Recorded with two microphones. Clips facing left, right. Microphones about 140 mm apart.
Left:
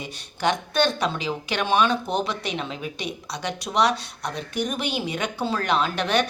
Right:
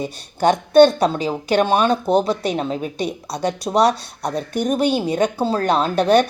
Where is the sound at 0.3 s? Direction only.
45° right (ahead or behind).